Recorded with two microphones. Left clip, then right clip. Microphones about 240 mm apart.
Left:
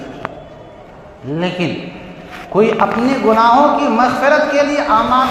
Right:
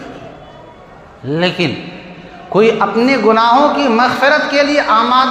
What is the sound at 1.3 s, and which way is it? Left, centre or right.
Speech, right.